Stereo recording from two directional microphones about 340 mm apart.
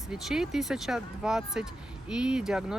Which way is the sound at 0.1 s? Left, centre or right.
Centre.